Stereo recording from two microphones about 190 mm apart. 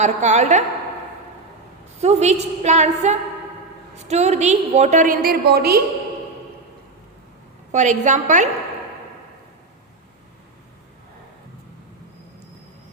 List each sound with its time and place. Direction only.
0.0 s a woman's voice: 40° right (ahead or behind)
2.0 s a woman's voice: 35° right (ahead or behind); by 5.8 s 55° right (ahead or behind)
7.7 s a woman's voice: 40° right (ahead or behind)